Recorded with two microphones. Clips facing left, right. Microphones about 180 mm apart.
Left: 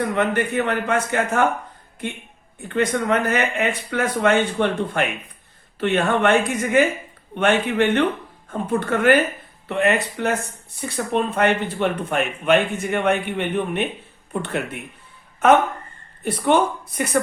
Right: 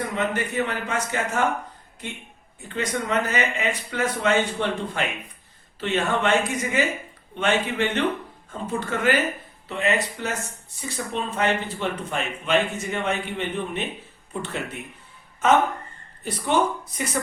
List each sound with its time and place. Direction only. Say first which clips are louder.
0.2 s speech: left 3 dB; 55° left (ahead or behind)
2.6 s speech: left 6 dB; 55° left (ahead or behind)